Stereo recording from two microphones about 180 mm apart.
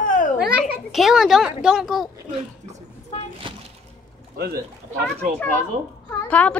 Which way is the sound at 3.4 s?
25° right (ahead or behind).